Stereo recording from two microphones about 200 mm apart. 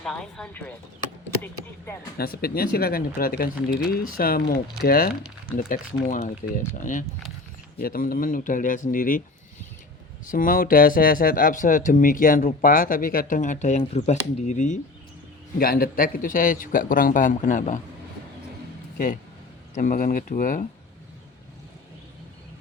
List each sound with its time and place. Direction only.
0.0 s speech: 5° left (ahead or behind)
2.1 s speech: 50° left (ahead or behind)
10.2 s speech: 45° left (ahead or behind)
19.7 s speech: 40° left (ahead or behind)